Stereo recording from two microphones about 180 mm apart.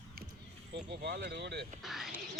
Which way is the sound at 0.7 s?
70° right (ahead or behind).